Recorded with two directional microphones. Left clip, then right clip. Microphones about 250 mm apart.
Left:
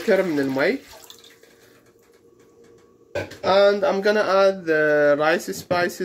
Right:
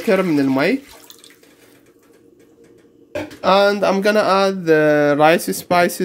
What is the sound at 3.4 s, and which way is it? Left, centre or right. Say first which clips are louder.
Speech: right 3 dB; right.